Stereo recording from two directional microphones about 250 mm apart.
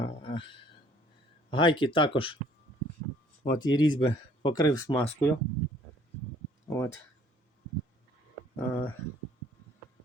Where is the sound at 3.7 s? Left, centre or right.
Centre.